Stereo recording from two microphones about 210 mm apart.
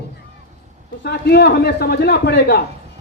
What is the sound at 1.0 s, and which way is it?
A man's voice, 50° left (ahead or behind).